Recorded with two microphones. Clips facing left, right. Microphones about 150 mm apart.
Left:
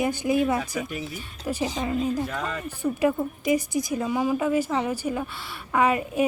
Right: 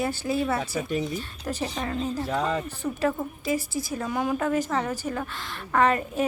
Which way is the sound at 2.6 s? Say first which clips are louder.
Left 3 dB; 10° left (ahead or behind).